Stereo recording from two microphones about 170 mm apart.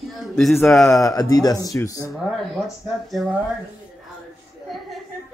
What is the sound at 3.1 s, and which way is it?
Speech, 5° right (ahead or behind).